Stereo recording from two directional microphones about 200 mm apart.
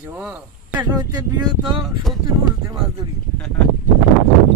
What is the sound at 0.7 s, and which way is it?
Speech, 20° right (ahead or behind).